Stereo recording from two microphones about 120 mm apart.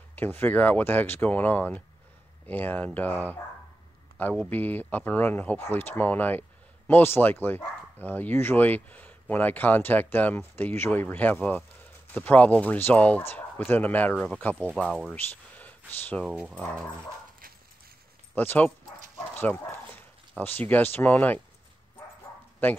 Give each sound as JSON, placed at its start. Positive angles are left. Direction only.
{"t": 0.1, "sound": "speech", "side_deg": 15}
{"t": 14.7, "sound": "speech", "side_deg": 0}
{"t": 15.1, "sound": "speech", "side_deg": 15}
{"t": 16.3, "sound": "speech", "side_deg": -10}
{"t": 18.3, "sound": "speech", "side_deg": 15}
{"t": 22.6, "sound": "speech", "side_deg": 15}